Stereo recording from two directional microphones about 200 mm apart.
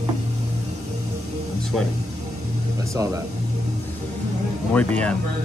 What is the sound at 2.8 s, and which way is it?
Speech, 15° right (ahead or behind).